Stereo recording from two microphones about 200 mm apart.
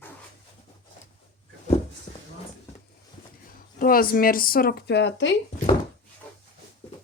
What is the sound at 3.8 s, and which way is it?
Speech, 45° left (ahead or behind).